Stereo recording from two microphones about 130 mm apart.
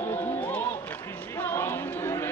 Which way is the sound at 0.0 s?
15° left (ahead or behind).